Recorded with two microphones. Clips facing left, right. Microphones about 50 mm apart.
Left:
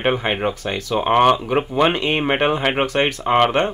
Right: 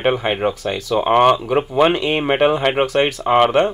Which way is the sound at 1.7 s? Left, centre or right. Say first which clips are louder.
Right 3 dB; centre.